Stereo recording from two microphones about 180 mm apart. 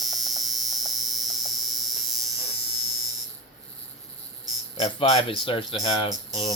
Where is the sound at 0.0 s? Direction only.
Centre (ahead or behind).